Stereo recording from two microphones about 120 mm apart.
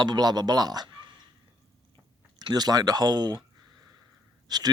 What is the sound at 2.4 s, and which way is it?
Speech, 35° right (ahead or behind).